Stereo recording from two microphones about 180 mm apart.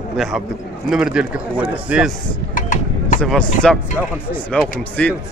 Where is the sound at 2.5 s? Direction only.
45° left (ahead or behind).